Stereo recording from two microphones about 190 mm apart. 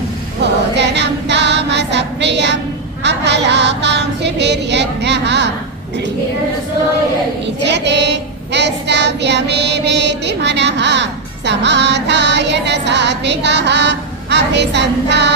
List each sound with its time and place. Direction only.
0.4 s choir: 65° right (ahead or behind)
7.6 s child singing: 65° right (ahead or behind)